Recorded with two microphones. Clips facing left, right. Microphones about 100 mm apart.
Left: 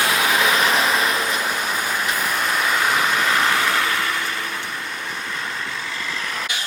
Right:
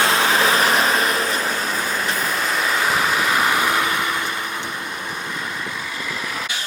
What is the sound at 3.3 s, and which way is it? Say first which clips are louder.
Vehicle: right 1 dB; 10° right (ahead or behind).